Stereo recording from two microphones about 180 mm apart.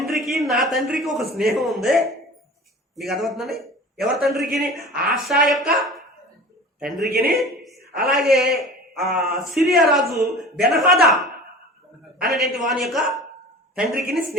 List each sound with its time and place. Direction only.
0.0 s a man's voice: centre (ahead or behind)
7.1 s a man's voice: 50° right (ahead or behind)
7.3 s a sound: centre (ahead or behind)
8.1 s a man's voice: centre (ahead or behind)
12.2 s a man's voice: centre (ahead or behind)